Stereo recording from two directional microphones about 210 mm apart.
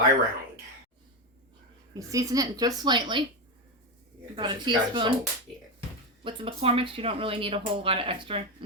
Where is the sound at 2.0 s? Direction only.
15° right (ahead or behind).